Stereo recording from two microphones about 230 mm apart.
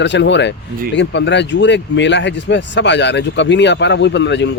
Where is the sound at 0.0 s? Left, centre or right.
Left.